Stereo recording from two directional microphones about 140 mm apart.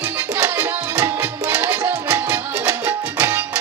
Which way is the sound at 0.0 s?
15° right (ahead or behind).